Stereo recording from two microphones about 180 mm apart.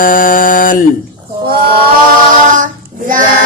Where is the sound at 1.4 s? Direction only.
60° right (ahead or behind).